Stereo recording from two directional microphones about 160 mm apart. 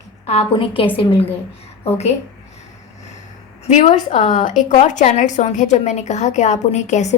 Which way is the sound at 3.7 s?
45° left (ahead or behind).